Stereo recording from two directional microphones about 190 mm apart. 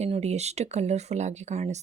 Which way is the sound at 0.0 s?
35° right (ahead or behind).